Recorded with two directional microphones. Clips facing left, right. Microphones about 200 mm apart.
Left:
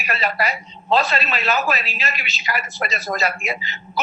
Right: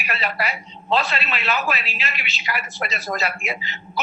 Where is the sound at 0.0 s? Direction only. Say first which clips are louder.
Left 3 dB; 40° left (ahead or behind).